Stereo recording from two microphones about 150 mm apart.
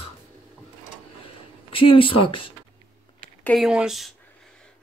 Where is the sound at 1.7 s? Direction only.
35° left (ahead or behind).